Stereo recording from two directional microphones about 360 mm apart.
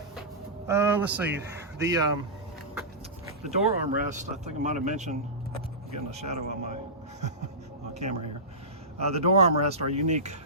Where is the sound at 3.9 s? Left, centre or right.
Right.